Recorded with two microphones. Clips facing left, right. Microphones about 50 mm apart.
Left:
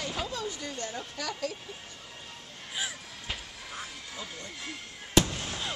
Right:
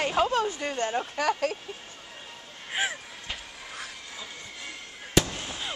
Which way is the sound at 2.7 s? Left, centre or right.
Right.